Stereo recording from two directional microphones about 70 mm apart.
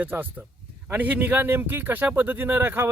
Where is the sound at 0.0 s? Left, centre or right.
Right.